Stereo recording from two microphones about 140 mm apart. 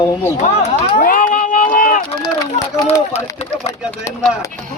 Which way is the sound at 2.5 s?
25° left (ahead or behind).